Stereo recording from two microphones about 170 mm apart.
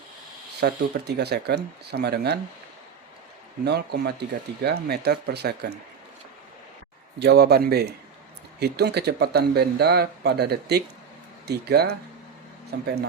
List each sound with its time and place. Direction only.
0.6 s speech: 80° right
3.6 s speech: 75° right (ahead or behind)
7.2 s speech: 75° right (ahead or behind)